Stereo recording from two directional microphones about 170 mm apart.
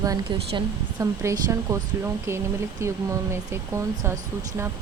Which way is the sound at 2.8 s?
15° right (ahead or behind).